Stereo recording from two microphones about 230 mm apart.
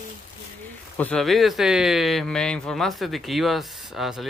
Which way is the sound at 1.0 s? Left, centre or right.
Centre.